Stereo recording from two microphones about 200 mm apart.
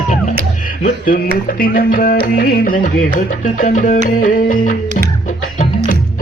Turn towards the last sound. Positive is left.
turn(degrees=40)  # may be behind; listen again after turning